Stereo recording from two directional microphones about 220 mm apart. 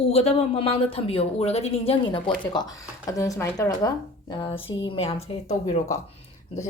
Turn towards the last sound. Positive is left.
turn(degrees=30)  # may be behind; listen again after turning